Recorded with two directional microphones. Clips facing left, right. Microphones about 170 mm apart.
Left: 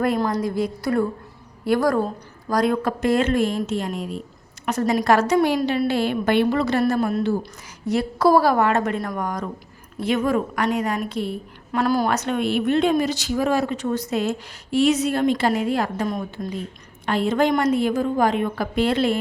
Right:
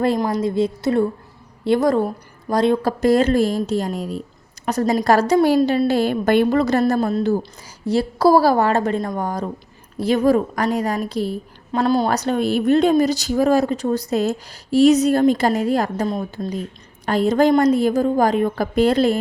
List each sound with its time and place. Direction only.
0.3 s a woman's voice: 25° right (ahead or behind); by 19.2 s 40° right (ahead or behind)